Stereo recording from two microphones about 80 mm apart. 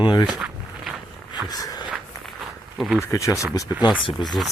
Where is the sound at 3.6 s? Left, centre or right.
Left.